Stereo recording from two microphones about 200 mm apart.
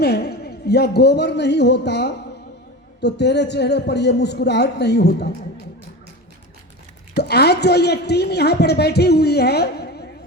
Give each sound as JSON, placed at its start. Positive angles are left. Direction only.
{"t": 0.0, "sound": "a woman's voice", "side_deg": 55}
{"t": 7.2, "sound": "a woman's voice", "side_deg": 55}